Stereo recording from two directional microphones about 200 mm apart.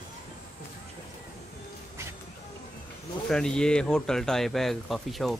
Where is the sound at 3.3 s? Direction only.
5° left (ahead or behind).